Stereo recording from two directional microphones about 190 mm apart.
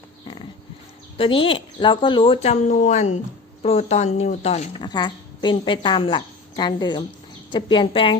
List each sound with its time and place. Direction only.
1.1 s a woman's voice: 30° left (ahead or behind)
4.8 s a woman's voice: 25° left (ahead or behind)